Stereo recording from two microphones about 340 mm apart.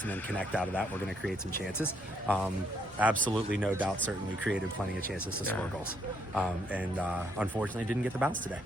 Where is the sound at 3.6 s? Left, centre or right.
Centre.